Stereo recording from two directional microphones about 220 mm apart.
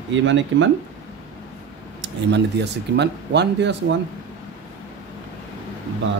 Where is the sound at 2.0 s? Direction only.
50° right (ahead or behind).